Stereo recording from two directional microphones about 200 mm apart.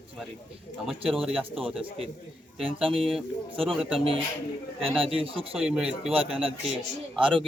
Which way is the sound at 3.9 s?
25° right (ahead or behind).